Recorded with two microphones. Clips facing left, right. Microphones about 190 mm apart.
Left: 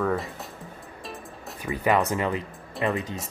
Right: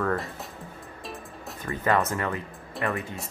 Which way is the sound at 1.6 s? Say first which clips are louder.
Left 2 dB; 15° left (ahead or behind).